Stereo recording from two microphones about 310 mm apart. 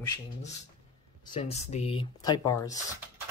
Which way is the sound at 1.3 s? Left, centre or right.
Centre.